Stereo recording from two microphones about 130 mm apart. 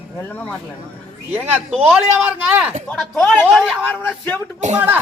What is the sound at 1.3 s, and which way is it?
Speech, 15° right (ahead or behind).